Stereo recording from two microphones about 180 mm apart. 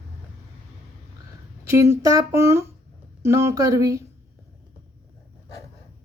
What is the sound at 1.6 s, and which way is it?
Speech, 15° right (ahead or behind).